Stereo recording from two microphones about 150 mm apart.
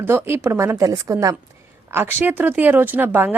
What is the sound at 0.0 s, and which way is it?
A woman's voice, 15° right (ahead or behind).